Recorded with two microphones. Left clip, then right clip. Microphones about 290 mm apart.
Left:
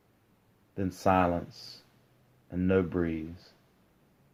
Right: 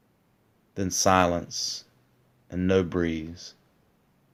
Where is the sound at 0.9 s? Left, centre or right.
Right.